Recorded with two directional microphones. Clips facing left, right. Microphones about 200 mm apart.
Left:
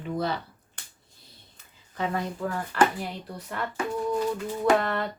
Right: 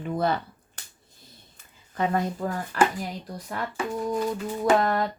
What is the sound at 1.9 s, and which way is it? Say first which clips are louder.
Speech: right 4 dB; 45° right (ahead or behind).